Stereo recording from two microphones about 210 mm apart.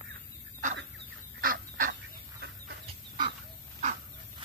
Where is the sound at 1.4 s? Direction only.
40° right (ahead or behind).